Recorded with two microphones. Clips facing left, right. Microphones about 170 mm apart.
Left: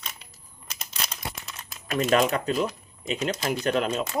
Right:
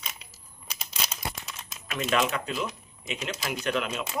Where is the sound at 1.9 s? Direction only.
40° left (ahead or behind).